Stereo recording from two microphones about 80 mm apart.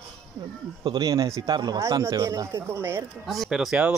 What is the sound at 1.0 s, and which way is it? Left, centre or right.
Speech, right.